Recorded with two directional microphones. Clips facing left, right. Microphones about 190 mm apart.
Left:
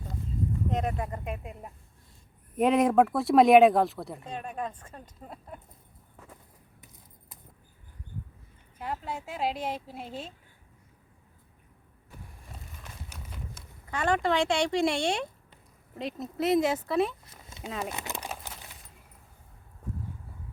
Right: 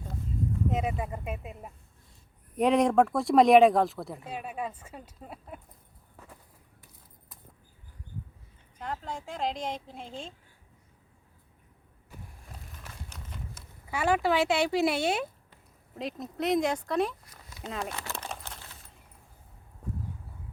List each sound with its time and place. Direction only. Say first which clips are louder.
0.7 s speech: even; 5° right (ahead or behind)
8.8 s a woman's voice: left 1 dB; 5° left (ahead or behind)
12.4 s a sound: even; centre (ahead or behind)
13.5 s speech: right 1 dB; 5° right (ahead or behind)
17.9 s a sound: left 1 dB; 20° left (ahead or behind)
18.3 s keys jangling: left 1 dB; 10° left (ahead or behind)